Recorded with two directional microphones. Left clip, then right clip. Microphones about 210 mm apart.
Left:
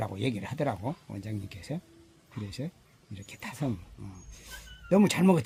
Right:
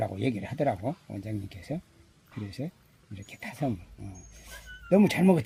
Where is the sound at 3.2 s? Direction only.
15° left (ahead or behind).